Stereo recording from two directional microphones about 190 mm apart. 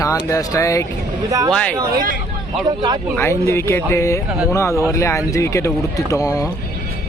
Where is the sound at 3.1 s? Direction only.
15° left (ahead or behind).